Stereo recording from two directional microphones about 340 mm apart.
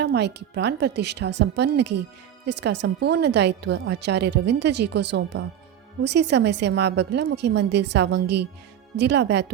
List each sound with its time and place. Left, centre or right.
0.0 s a woman's voice: right